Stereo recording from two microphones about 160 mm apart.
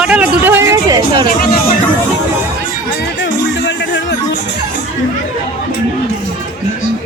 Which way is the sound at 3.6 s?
90° left.